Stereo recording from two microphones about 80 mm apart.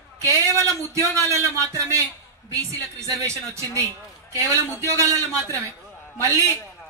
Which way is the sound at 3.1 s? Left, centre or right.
Right.